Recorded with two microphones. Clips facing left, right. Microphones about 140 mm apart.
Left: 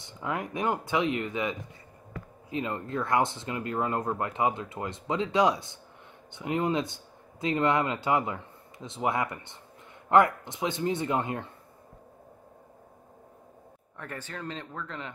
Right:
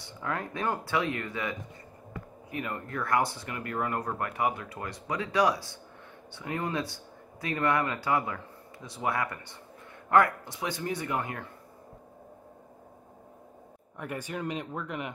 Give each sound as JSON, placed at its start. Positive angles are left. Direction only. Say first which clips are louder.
{"t": 0.0, "sound": "speech", "louder": "left 1 dB", "side_deg": 15}
{"t": 13.9, "sound": "speech", "louder": "right 4 dB", "side_deg": -15}